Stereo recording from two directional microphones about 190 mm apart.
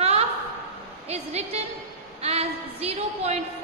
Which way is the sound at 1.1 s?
35° right (ahead or behind).